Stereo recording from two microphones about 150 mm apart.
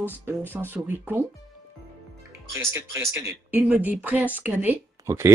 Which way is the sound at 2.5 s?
15° right (ahead or behind).